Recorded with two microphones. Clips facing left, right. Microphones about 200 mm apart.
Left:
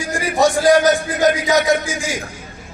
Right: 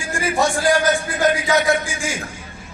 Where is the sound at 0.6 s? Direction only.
40° left (ahead or behind).